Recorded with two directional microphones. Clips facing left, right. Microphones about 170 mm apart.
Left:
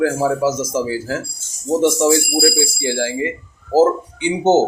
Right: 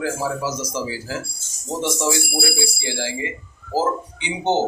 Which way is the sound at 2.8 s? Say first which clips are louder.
Left 7 dB; 50° left (ahead or behind).